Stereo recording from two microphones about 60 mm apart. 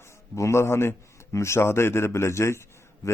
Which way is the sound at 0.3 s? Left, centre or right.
Left.